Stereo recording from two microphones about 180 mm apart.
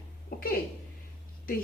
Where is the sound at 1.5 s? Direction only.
55° left (ahead or behind).